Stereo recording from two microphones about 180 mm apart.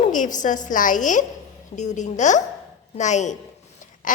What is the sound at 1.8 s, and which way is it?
A woman's voice, 40° left (ahead or behind).